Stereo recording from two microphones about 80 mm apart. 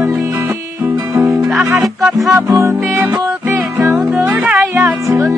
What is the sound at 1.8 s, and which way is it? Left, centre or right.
Music, centre.